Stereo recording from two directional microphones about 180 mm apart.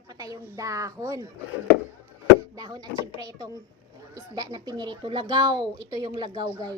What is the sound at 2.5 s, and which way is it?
Speech, 20° right (ahead or behind).